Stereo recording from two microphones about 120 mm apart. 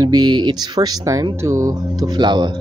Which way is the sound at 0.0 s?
35° right (ahead or behind).